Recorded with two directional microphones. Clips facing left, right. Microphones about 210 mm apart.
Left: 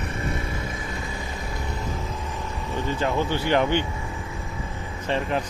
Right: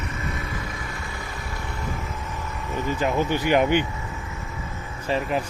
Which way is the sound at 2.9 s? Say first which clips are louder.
Right 2 dB; 15° right (ahead or behind).